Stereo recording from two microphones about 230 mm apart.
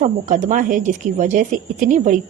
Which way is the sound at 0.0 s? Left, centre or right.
Right.